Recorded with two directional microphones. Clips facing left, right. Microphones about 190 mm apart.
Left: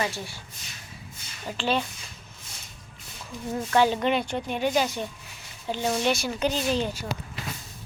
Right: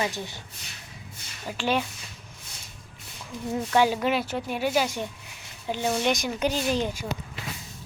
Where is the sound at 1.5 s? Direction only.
10° right (ahead or behind).